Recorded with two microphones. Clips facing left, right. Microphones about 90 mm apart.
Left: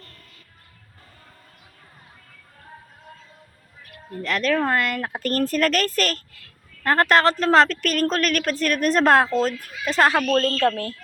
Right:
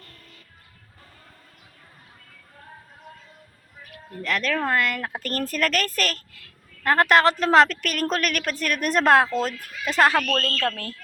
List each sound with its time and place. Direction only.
4.2 s a woman's voice: centre (ahead or behind)
10.1 s speech: 15° left (ahead or behind)